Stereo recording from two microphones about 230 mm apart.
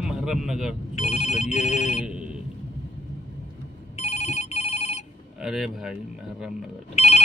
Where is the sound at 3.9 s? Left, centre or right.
Left.